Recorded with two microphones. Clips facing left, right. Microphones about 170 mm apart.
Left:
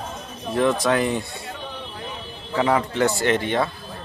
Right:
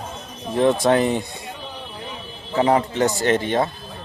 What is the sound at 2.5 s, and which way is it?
Speech, 30° right (ahead or behind).